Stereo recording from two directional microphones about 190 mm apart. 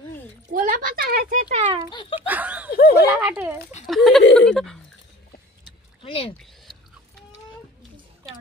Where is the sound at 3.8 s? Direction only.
Centre (ahead or behind).